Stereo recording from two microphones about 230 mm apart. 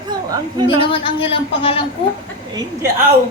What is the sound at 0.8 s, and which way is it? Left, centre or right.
A woman's voice, left.